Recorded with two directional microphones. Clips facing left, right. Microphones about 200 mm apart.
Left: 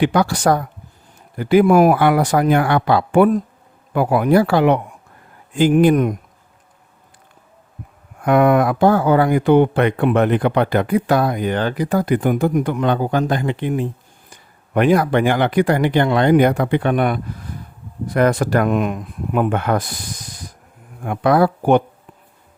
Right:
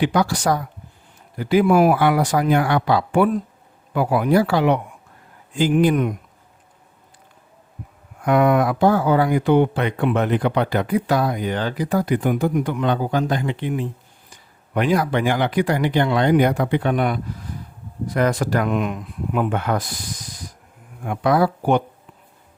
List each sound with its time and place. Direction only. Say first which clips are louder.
0.0 s speech: left 3 dB; 60° left (ahead or behind)
8.2 s speech: left 3 dB; 55° left (ahead or behind)
21.0 s speech: left 3 dB; 55° left (ahead or behind)